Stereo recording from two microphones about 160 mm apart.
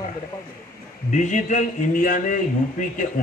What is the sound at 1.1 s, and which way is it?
A man's voice, 50° left (ahead or behind).